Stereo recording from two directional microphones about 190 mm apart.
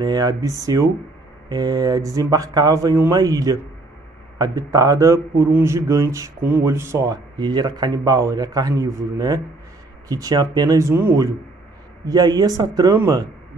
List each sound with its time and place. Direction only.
0.0 s a man's voice: 20° right (ahead or behind)